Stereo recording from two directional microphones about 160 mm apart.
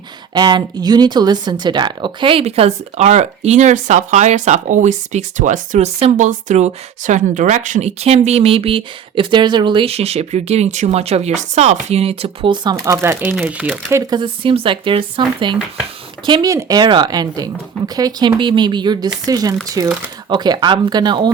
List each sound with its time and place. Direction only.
0.3 s speech: 25° right (ahead or behind)
12.8 s speech: 15° right (ahead or behind)
13.9 s speech: 25° right (ahead or behind)